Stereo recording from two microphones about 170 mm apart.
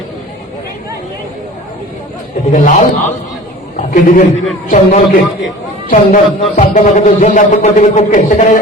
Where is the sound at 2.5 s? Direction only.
50° left (ahead or behind).